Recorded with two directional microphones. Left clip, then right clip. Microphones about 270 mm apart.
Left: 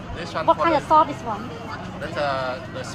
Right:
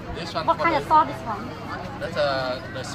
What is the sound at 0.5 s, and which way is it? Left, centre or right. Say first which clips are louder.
Speech: left 2 dB; left.